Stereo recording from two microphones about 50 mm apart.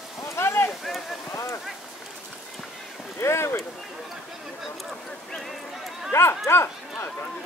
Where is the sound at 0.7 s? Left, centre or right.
Centre.